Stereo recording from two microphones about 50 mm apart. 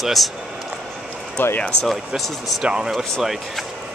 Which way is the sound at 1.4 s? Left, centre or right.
Left.